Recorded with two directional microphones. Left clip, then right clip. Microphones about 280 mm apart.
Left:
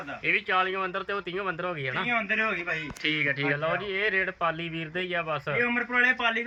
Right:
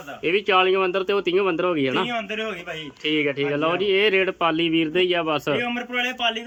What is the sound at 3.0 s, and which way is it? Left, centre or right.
Speech, right.